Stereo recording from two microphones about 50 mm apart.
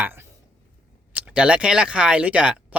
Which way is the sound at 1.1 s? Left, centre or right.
Right.